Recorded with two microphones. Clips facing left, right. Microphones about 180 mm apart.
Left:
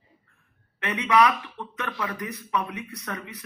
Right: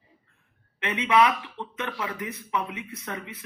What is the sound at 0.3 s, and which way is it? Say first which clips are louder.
Speech: left 1 dB; 20° right (ahead or behind).